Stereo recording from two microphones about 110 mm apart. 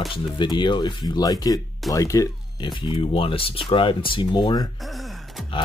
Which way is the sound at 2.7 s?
50° left (ahead or behind).